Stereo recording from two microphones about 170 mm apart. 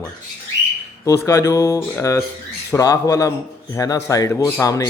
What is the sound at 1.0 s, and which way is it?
A man's voice, 15° left (ahead or behind).